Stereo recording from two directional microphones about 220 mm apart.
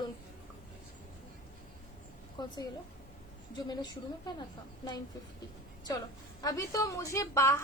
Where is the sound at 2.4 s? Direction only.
20° left (ahead or behind).